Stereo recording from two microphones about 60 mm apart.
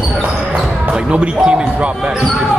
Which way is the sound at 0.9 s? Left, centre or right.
Centre.